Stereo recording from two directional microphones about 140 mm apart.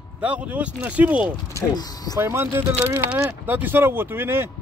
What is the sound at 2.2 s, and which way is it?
Speech, 15° right (ahead or behind).